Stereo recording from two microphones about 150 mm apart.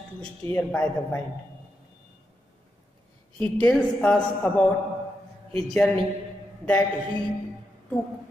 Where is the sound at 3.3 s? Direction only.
5° left (ahead or behind).